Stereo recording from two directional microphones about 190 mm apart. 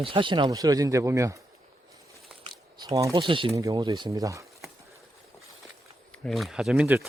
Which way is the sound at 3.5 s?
20° right (ahead or behind).